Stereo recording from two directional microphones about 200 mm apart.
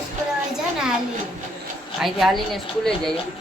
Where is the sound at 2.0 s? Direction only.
Centre (ahead or behind).